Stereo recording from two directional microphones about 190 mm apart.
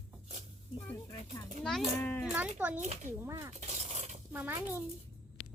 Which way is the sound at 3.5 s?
35° right (ahead or behind).